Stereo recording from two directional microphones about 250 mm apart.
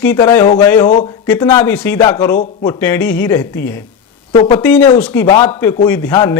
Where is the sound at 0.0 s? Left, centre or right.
Centre.